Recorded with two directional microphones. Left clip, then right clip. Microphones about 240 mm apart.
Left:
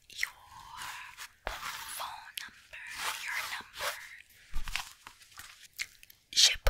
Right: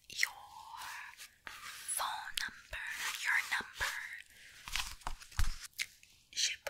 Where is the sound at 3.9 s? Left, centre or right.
Right.